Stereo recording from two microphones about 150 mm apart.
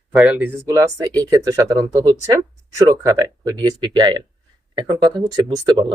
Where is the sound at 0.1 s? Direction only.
5° right (ahead or behind).